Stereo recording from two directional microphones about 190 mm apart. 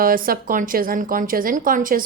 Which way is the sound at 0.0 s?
50° right (ahead or behind).